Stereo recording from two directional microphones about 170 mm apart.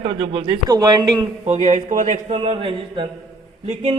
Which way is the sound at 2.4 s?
30° right (ahead or behind).